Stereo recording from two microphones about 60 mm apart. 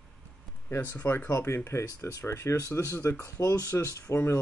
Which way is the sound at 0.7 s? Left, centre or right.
Left.